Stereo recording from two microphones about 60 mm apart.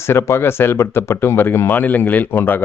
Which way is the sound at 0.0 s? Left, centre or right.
Left.